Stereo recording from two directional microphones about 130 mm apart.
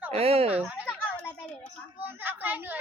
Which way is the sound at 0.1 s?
50° right (ahead or behind).